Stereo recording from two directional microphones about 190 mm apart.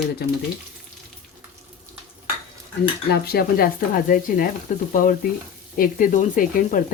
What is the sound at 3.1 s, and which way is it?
Speech, 55° left (ahead or behind).